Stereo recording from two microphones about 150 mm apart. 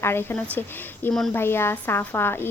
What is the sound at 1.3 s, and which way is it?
Speech, 15° left (ahead or behind).